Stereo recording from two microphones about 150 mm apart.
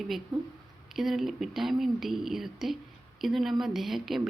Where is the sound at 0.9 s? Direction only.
Centre (ahead or behind).